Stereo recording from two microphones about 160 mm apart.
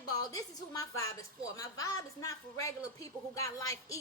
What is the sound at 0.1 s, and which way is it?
A woman's voice, 25° left (ahead or behind).